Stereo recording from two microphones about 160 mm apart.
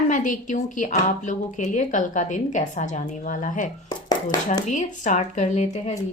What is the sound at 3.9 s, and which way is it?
Dishes, 25° left (ahead or behind).